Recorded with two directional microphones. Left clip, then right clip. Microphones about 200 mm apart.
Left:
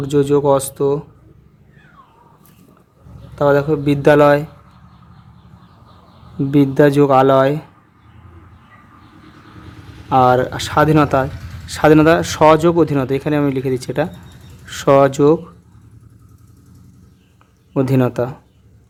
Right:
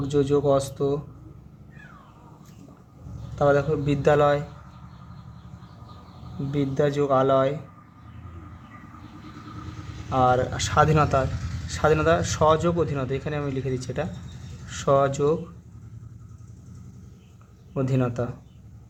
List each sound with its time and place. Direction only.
0.1 s speech: 40° left (ahead or behind)
3.3 s speech: 35° left (ahead or behind)
6.5 s speech: 50° left (ahead or behind)
10.1 s speech: 40° left (ahead or behind)
17.7 s speech: 40° left (ahead or behind)